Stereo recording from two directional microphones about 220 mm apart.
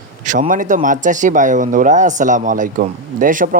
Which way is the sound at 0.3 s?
35° right (ahead or behind).